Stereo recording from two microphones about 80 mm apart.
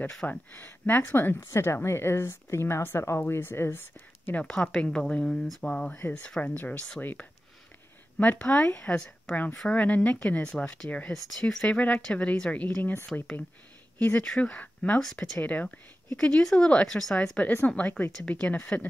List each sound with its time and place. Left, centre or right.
0.3 s speech: left
4.4 s a woman's voice: centre
11.2 s a woman's voice: centre
13.9 s a woman's voice: left